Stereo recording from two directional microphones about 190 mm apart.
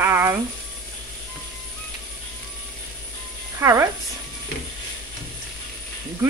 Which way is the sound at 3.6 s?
15° right (ahead or behind).